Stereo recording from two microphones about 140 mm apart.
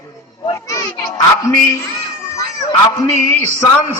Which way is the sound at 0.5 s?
20° left (ahead or behind).